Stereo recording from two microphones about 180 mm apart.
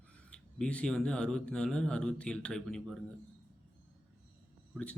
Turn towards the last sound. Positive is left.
turn(degrees=5)  # may be behind; listen again after turning